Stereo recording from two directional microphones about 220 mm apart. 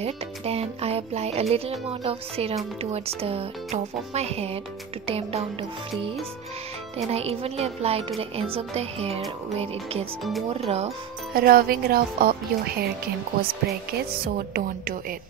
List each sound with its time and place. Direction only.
0.0 s speech: 30° right (ahead or behind)
7.1 s speech: 30° right (ahead or behind)
10.5 s speech: 25° right (ahead or behind)
11.3 s a woman's voice: 40° right (ahead or behind)